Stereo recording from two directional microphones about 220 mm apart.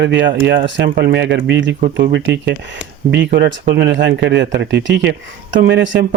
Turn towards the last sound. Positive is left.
turn(degrees=-55)  # may be behind; listen again after turning